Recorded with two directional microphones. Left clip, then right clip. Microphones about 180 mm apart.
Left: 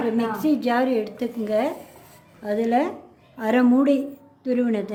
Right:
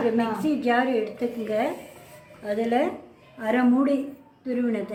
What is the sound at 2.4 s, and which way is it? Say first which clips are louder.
A woman's voice: left 2 dB; 55° left (ahead or behind).